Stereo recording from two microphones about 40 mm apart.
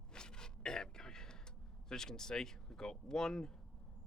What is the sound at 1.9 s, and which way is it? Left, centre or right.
Speech, centre.